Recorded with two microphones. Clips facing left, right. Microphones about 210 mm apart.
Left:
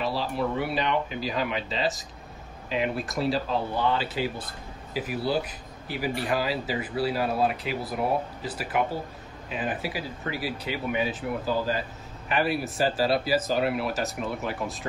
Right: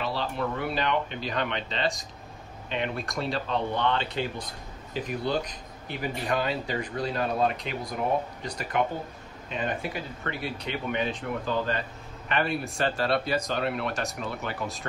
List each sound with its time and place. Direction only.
0.0 s speech: centre (ahead or behind)